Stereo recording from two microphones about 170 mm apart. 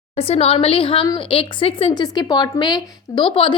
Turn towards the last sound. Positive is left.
turn(degrees=30)  # may be behind; listen again after turning